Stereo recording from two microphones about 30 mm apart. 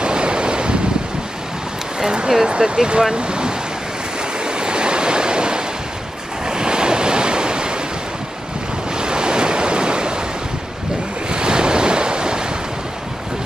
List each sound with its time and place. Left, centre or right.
0.0 s wind: right
2.0 s speech: right
3.2 s ocean: right
4.5 s waves: right
8.9 s waves: right
11.2 s waves: right